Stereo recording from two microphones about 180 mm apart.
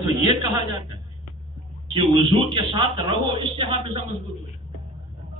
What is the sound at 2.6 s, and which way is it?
Speech, 30° right (ahead or behind).